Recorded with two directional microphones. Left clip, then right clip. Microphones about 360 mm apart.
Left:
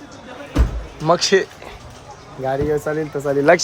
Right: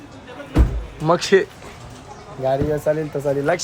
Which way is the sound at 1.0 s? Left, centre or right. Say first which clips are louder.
Left 1 dB; centre.